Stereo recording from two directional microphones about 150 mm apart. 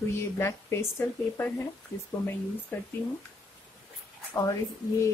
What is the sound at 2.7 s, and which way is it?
Speech, 15° left (ahead or behind).